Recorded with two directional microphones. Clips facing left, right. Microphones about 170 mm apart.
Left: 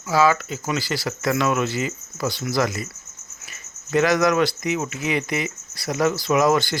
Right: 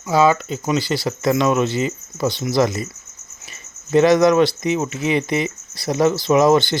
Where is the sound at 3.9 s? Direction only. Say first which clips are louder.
Right 6 dB; 25° right (ahead or behind).